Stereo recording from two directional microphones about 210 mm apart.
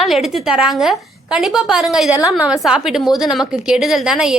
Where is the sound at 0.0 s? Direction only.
Centre (ahead or behind).